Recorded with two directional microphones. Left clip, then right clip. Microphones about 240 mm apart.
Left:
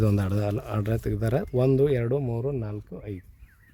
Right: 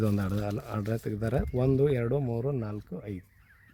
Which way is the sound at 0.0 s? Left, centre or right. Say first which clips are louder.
Left 4 dB; left.